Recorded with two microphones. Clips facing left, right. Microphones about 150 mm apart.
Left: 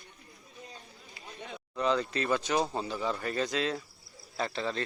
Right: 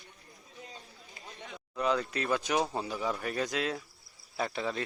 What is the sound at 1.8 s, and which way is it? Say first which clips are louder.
A man's voice: left 1 dB; 5° right (ahead or behind).